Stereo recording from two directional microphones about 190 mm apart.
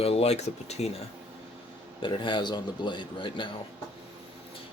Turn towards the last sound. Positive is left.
turn(degrees=25)  # may be behind; listen again after turning